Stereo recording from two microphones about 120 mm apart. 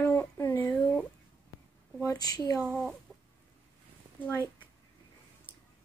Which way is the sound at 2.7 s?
5° left (ahead or behind).